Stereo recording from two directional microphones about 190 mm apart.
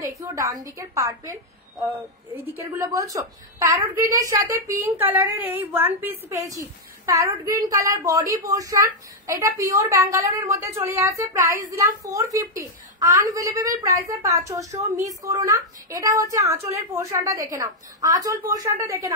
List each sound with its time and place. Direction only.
0.0 s a woman's voice: 15° right (ahead or behind)